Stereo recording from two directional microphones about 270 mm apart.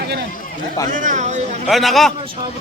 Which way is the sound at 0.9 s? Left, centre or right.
Right.